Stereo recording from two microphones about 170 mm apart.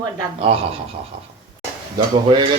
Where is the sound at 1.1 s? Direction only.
30° right (ahead or behind).